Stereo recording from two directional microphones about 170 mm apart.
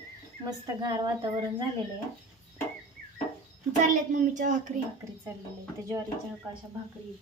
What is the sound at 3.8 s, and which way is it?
Speech, 50° right (ahead or behind).